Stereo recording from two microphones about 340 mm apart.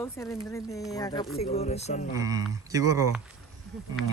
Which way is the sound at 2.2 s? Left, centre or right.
Centre.